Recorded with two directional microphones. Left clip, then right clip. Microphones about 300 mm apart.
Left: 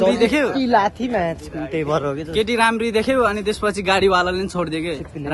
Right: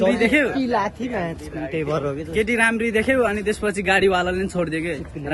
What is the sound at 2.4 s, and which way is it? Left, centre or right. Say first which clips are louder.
Speech: left 2 dB; centre.